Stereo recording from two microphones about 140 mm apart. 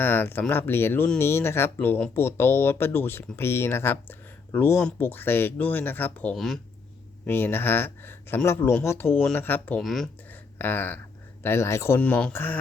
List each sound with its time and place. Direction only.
0.0 s speech: 15° left (ahead or behind)
6.3 s speech: centre (ahead or behind)
7.3 s speech: 15° left (ahead or behind)
9.8 s speech: centre (ahead or behind)
10.6 s speech: 15° left (ahead or behind)